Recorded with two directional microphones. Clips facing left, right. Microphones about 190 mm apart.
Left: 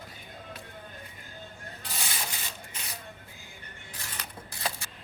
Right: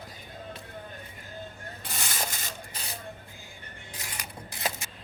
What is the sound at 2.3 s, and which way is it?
Printer, 35° right (ahead or behind).